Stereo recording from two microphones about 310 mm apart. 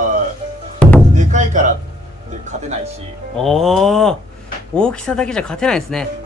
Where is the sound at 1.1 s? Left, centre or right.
Right.